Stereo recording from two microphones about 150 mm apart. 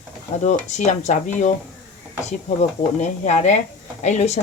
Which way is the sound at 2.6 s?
50° left (ahead or behind).